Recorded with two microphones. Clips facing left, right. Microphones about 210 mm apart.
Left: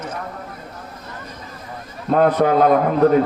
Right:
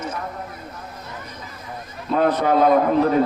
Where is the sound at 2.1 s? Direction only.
50° left (ahead or behind).